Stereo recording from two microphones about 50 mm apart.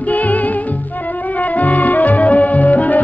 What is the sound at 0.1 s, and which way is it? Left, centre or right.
Music, left.